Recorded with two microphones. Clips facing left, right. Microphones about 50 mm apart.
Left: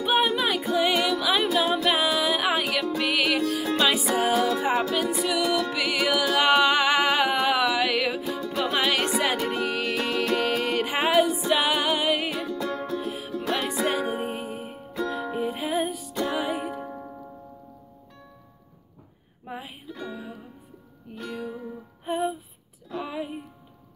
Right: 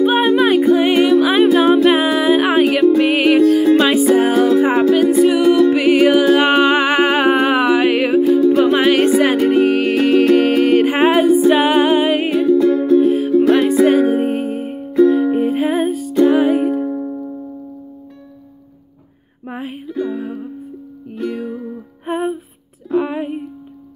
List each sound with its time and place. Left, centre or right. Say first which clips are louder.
0.0 s music: right 10 dB; right
8.3 s music: right 16 dB; right
13.3 s music: right 14 dB; centre
13.6 s music: right 14 dB; right
16.2 s music: right 15 dB; right
16.8 s music: right 15 dB; centre
19.4 s music: right 10 dB; right
19.9 s music: right 15 dB; right
20.2 s music: right 14 dB; right
22.1 s music: right 7 dB; right